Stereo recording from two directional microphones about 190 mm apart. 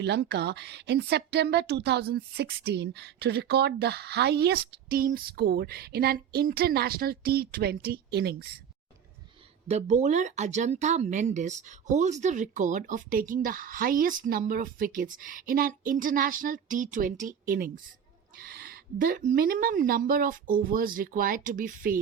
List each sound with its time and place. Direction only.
0.0 s a woman's voice: 65° right (ahead or behind)
9.6 s speech: 35° right (ahead or behind)